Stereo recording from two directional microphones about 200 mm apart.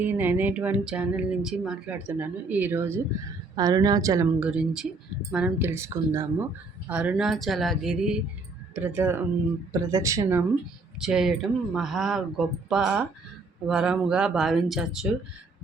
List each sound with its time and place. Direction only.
0.0 s speech: 10° right (ahead or behind)
4.4 s speech: 5° right (ahead or behind)
11.0 s speech: centre (ahead or behind)